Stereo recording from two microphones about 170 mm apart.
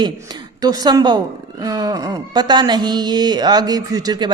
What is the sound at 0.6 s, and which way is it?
Speech, 20° right (ahead or behind).